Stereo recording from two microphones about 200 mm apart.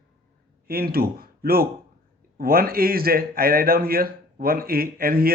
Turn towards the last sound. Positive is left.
turn(degrees=-45)  # may be behind; listen again after turning